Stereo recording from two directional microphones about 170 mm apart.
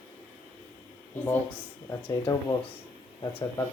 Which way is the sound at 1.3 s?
15° left (ahead or behind).